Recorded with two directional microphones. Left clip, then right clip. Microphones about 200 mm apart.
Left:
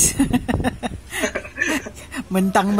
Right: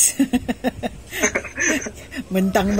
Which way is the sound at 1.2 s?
25° right (ahead or behind).